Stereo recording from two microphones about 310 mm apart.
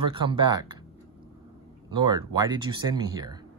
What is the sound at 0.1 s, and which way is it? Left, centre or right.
Speech, centre.